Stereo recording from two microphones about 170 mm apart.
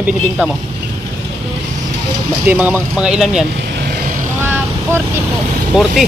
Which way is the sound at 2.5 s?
10° right (ahead or behind).